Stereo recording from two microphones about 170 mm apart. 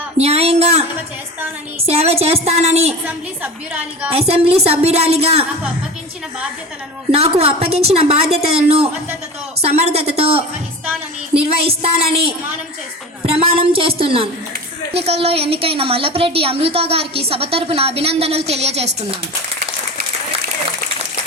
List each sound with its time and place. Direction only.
0.2 s a woman's voice: 35° right (ahead or behind)
3.1 s a woman's voice: 10° right (ahead or behind)
4.1 s a woman's voice: 35° right (ahead or behind)
7.1 s a woman's voice: 35° right (ahead or behind)
13.2 s a woman's voice: 35° right (ahead or behind)